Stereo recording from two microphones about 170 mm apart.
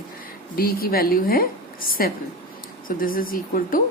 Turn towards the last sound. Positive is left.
turn(degrees=55)  # may be behind; listen again after turning